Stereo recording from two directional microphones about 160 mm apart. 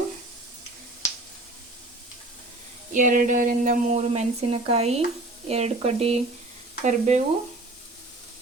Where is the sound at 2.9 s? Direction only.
55° right (ahead or behind).